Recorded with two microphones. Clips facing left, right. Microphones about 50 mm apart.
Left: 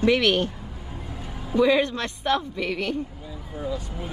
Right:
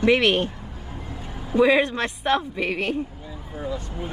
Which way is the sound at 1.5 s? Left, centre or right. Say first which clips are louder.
Right 2 dB; right.